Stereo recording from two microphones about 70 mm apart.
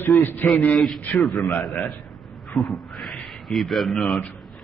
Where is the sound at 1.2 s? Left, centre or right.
Centre.